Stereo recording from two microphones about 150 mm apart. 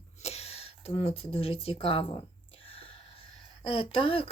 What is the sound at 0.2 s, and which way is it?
Speech, 45° left (ahead or behind).